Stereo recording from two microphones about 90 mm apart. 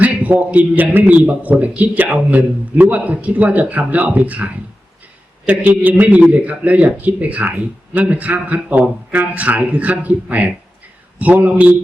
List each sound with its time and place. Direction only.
0.0 s a man's voice: 15° right (ahead or behind)
5.5 s a man's voice: 15° right (ahead or behind)